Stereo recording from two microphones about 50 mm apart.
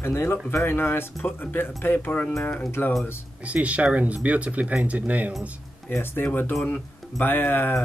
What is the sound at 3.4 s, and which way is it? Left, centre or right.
Speech, right.